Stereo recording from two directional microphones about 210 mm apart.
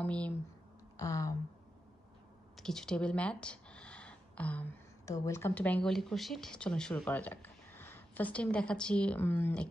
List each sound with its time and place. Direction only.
0.0 s speech: 5° left (ahead or behind)
2.5 s speech: centre (ahead or behind)